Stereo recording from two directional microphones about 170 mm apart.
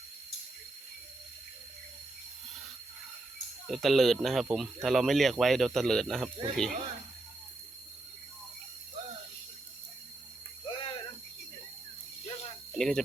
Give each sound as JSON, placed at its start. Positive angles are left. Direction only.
{"t": 3.7, "sound": "speech", "side_deg": 0}
{"t": 10.7, "sound": "a sound", "side_deg": 30}
{"t": 12.7, "sound": "speech", "side_deg": 5}